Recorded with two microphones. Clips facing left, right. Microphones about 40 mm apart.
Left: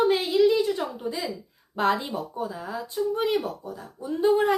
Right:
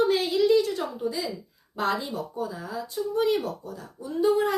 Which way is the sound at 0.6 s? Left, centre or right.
Left.